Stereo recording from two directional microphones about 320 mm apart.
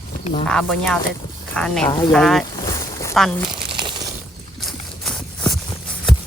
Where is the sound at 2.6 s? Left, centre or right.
Centre.